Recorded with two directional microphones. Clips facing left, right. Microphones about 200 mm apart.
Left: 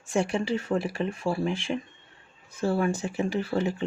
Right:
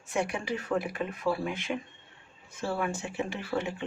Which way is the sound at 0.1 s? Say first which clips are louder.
Left 5 dB; 30° left (ahead or behind).